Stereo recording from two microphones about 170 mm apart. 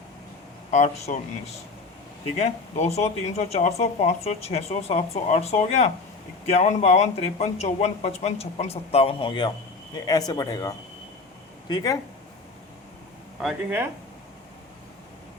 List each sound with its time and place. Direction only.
0.7 s speech: 40° left (ahead or behind); by 11.9 s 20° left (ahead or behind)
13.4 s speech: centre (ahead or behind)